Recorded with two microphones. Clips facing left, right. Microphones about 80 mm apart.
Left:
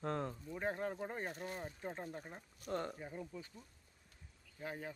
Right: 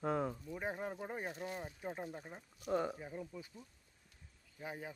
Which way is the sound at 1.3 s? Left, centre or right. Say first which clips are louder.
Right 1 dB; left.